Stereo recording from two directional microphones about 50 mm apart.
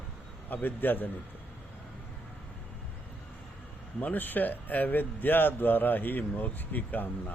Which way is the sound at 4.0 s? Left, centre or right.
Left.